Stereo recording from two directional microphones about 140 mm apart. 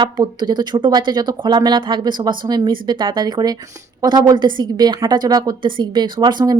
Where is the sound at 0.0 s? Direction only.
30° right (ahead or behind).